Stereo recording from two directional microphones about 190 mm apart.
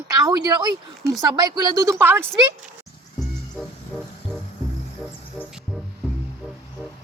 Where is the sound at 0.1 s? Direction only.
20° right (ahead or behind).